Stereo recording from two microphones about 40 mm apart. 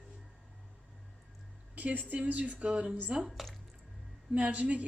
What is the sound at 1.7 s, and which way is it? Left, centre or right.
Speech, right.